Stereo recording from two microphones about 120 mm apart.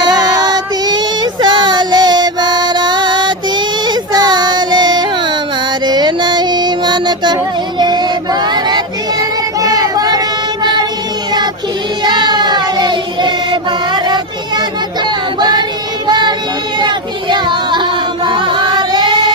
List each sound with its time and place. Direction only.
0.0 s child singing: 35° right (ahead or behind)
5.8 s music: 35° right (ahead or behind)
7.8 s child singing: 35° right (ahead or behind)
12.0 s child singing: 40° right (ahead or behind)
16.0 s a sound: 40° right (ahead or behind)
18.3 s music: 40° right (ahead or behind)